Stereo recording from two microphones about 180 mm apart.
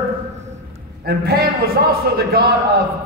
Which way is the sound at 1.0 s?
60° right (ahead or behind).